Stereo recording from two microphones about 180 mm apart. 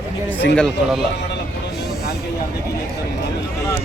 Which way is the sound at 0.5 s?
5° left (ahead or behind).